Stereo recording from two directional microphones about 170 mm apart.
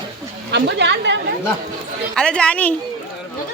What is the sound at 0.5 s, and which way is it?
Speech, 90° right.